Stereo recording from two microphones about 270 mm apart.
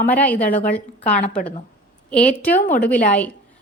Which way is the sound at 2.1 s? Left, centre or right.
Centre.